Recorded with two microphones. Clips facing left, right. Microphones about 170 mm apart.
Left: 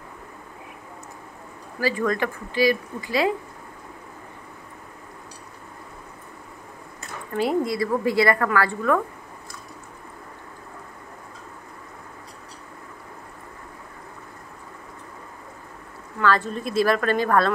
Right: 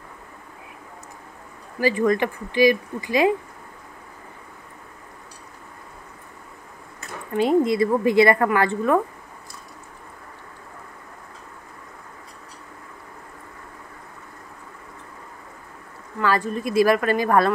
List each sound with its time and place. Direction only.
1.8 s speech: 20° right (ahead or behind)
7.3 s a woman's voice: 20° right (ahead or behind)
16.2 s speech: 10° right (ahead or behind)